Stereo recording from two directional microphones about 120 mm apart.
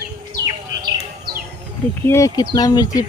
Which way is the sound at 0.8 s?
35° right (ahead or behind).